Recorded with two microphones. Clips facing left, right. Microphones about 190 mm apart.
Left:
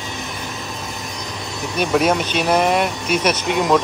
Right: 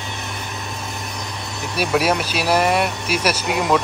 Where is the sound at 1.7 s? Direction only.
5° right (ahead or behind).